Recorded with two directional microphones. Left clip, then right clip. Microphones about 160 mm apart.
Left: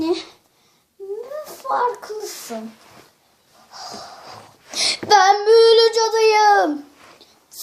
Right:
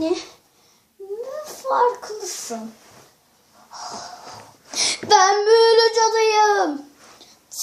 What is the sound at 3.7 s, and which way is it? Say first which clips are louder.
Wheeze: right 1 dB; 15° left (ahead or behind).